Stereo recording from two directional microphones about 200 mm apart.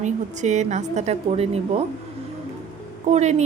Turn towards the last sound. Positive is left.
turn(degrees=-35)  # may be behind; listen again after turning